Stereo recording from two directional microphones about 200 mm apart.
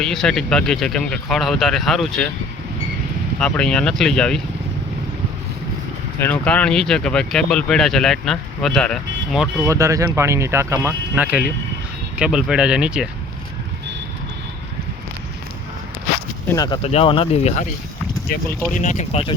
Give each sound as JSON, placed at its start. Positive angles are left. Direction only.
{"t": 0.0, "sound": "speech", "side_deg": 0}
{"t": 3.4, "sound": "speech", "side_deg": 5}
{"t": 6.1, "sound": "speech", "side_deg": 10}
{"t": 9.6, "sound": "speech", "side_deg": -15}
{"t": 16.5, "sound": "speech", "side_deg": 20}
{"t": 18.3, "sound": "speech", "side_deg": 45}